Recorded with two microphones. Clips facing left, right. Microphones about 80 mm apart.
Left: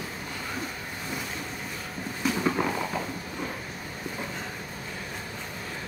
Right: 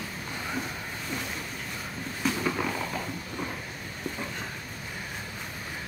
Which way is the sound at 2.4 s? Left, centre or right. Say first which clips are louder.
Left 3 dB; centre.